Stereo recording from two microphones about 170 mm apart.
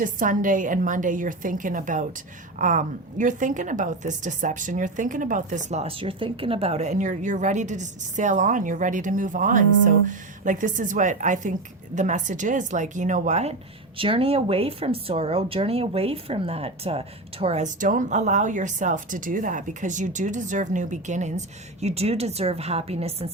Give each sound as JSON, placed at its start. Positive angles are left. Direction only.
{"t": 0.0, "sound": "a woman's voice", "side_deg": -50}
{"t": 14.0, "sound": "speech", "side_deg": -35}